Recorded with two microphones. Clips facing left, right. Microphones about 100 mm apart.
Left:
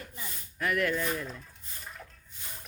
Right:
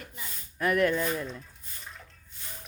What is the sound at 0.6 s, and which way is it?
Speech, 35° right (ahead or behind).